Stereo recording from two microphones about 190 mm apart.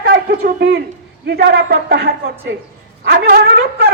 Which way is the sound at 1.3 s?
65° right (ahead or behind).